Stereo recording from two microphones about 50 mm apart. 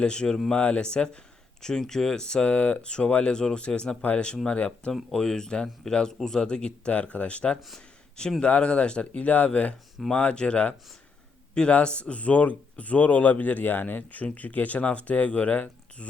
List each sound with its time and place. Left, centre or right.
0.0 s speech: centre
5.1 s speech: centre; by 16.0 s left